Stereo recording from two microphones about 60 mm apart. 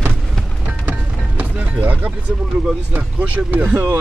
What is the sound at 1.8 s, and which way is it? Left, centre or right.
A man's voice, right.